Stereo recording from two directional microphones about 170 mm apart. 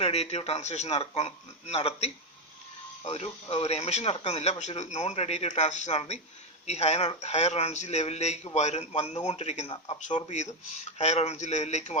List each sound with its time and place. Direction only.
0.0 s speech: 35° left (ahead or behind)